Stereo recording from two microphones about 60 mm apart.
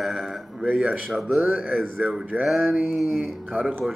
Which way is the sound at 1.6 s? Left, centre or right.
Right.